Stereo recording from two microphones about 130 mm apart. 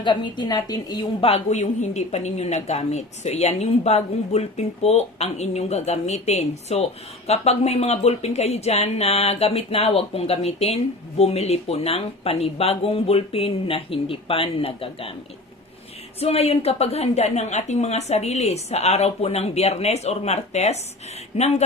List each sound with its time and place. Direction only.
0.0 s a woman's voice: 35° left (ahead or behind)
1.2 s a woman's voice: 55° left (ahead or behind)
16.2 s a woman's voice: 50° left (ahead or behind)